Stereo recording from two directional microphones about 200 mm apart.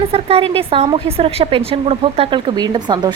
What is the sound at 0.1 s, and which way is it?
A woman's voice, 30° right (ahead or behind).